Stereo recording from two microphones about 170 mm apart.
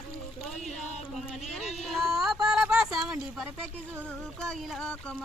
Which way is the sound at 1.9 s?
Centre (ahead or behind).